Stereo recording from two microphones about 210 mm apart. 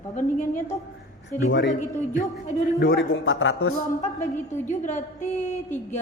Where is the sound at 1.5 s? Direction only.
60° left (ahead or behind).